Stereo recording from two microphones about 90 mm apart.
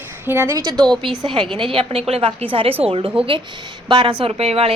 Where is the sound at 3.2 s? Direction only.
70° right (ahead or behind).